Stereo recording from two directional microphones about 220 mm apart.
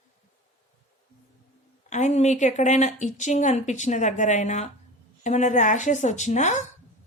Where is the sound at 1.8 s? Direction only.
35° left (ahead or behind).